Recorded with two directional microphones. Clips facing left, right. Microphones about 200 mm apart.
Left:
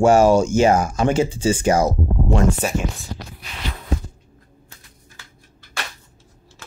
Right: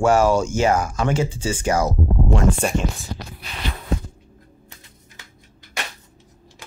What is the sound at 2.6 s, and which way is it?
Speech, 5° left (ahead or behind).